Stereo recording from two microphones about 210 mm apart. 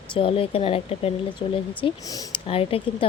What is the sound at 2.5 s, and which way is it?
Speech, 25° left (ahead or behind).